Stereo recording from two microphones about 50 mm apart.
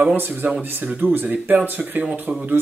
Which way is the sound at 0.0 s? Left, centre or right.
Right.